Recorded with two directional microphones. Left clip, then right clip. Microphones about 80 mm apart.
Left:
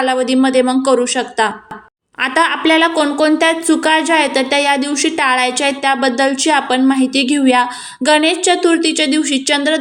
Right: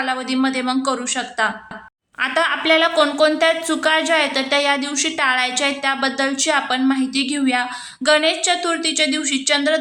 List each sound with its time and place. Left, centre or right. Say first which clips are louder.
0.0 s a woman's voice: left 7 dB; left